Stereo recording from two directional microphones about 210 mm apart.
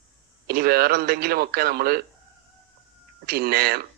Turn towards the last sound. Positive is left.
turn(degrees=-45)  # may be behind; listen again after turning